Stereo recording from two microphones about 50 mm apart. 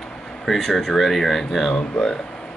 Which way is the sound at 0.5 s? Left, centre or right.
Centre.